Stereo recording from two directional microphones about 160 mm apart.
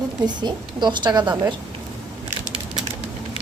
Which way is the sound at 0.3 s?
25° right (ahead or behind).